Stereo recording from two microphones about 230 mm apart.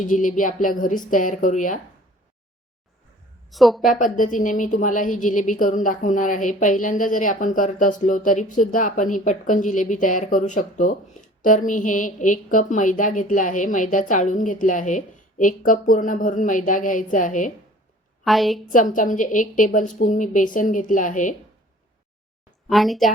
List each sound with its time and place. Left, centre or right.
0.0 s a woman's voice: left
3.5 s speech: centre
3.8 s a woman's voice: left
18.3 s speech: centre
18.7 s a woman's voice: left
22.7 s speech: centre